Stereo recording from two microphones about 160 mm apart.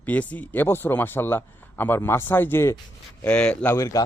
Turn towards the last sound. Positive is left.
turn(degrees=20)  # may be behind; listen again after turning